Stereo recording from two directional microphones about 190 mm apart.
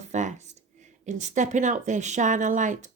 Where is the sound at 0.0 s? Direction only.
40° right (ahead or behind).